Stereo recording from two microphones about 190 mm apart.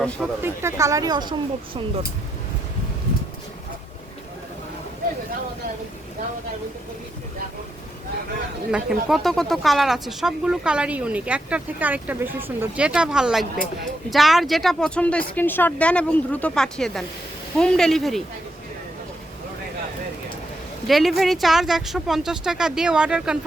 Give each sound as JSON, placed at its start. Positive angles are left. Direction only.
{"t": 0.4, "sound": "a woman's voice", "side_deg": -15}
{"t": 8.7, "sound": "speech", "side_deg": 0}
{"t": 20.8, "sound": "speech", "side_deg": 0}